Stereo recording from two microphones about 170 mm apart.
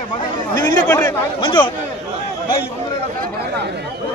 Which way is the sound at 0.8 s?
10° left (ahead or behind).